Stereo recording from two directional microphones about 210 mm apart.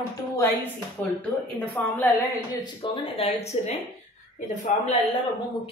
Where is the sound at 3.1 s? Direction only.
30° left (ahead or behind).